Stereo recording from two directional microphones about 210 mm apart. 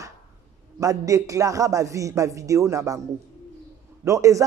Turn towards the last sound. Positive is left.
turn(degrees=-15)  # may be behind; listen again after turning